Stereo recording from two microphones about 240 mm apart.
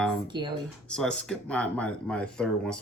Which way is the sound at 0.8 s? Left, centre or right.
Centre.